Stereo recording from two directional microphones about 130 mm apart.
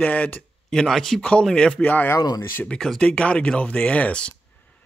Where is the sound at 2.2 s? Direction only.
30° left (ahead or behind).